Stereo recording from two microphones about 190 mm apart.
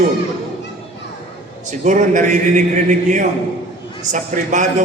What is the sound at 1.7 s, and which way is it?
A man's voice, 40° right (ahead or behind).